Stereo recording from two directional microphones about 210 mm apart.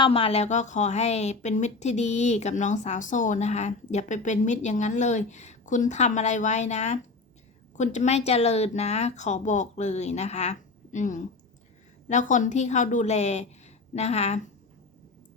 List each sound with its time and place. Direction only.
0.0 s a woman's voice: 25° left (ahead or behind)